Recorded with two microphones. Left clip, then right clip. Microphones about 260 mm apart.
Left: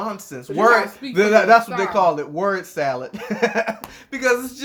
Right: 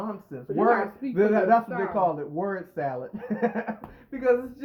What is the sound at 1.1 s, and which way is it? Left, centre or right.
Speech, left.